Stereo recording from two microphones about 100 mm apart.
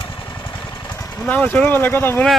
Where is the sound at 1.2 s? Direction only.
15° left (ahead or behind).